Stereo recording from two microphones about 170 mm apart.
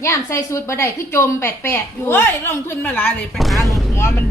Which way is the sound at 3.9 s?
15° left (ahead or behind).